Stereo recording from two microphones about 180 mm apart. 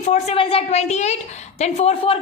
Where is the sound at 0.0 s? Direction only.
35° left (ahead or behind).